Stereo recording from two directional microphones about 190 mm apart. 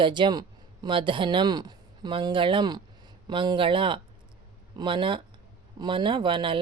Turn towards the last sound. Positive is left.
turn(degrees=-25)  # may be behind; listen again after turning